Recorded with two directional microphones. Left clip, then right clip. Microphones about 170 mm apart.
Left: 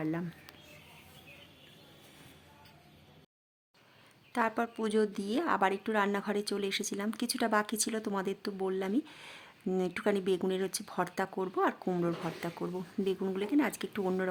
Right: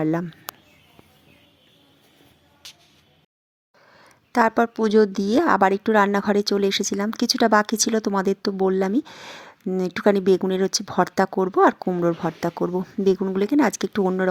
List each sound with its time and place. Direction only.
0.0 s a woman's voice: 35° right (ahead or behind)
4.3 s a woman's voice: 40° right (ahead or behind)